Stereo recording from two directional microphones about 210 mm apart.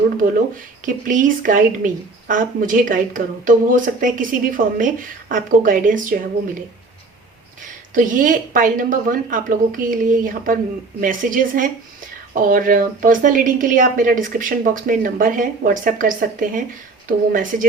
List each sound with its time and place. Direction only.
0.2 s speech: 40° right (ahead or behind)
7.9 s speech: 40° right (ahead or behind)